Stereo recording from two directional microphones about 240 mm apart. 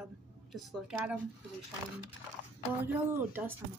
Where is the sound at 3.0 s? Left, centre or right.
Centre.